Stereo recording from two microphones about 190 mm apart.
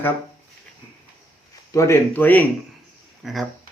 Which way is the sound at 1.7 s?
15° left (ahead or behind).